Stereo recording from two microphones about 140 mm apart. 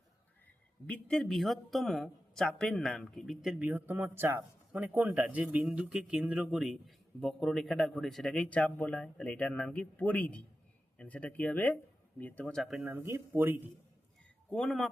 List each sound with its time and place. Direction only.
0.9 s speech: 10° left (ahead or behind)
12.8 s speech: 15° right (ahead or behind)
14.5 s speech: 5° left (ahead or behind)